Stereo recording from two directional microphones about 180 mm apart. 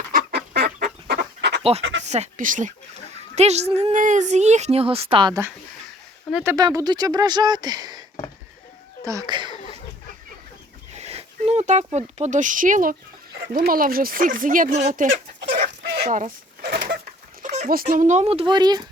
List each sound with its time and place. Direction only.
0.1 s chicken: 60° right (ahead or behind)
1.8 s a sound: 90° right
2.0 s speech: 40° right (ahead or behind)
6.3 s speech: 10° right (ahead or behind)
6.6 s speech: 20° right (ahead or behind)
9.0 s a child's voice: 20° right (ahead or behind)
10.9 s speech: 35° right (ahead or behind)
15.1 s chicken: 70° right (ahead or behind)
16.0 s a sound: 45° right (ahead or behind)
17.4 s speech: 40° right (ahead or behind); by 18.9 s 25° right (ahead or behind)